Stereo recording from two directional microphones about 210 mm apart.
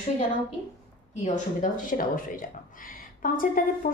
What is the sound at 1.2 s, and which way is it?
Speech, 35° left (ahead or behind).